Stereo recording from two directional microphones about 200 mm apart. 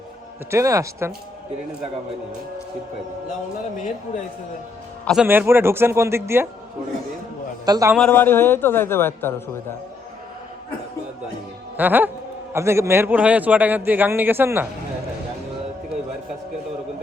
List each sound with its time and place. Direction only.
0.5 s a man's voice: 15° right (ahead or behind)
5.0 s a man's voice: 5° right (ahead or behind)
7.6 s a man's voice: 15° right (ahead or behind)
7.9 s a man's voice: 5° left (ahead or behind)
11.8 s a man's voice: 10° right (ahead or behind)